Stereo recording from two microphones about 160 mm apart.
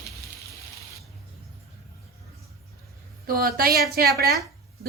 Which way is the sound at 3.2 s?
70° right (ahead or behind).